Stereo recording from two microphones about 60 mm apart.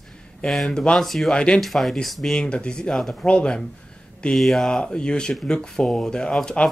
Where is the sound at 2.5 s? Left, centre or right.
Centre.